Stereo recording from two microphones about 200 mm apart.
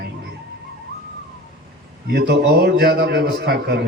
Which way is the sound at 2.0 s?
55° right (ahead or behind).